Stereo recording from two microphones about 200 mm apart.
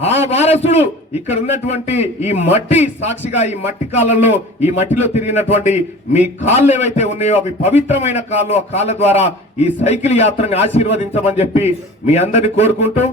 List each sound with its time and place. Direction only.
0.0 s a man's voice: 30° left (ahead or behind)